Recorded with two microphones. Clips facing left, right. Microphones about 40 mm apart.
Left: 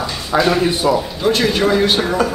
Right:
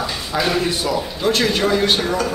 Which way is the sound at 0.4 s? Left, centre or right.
Centre.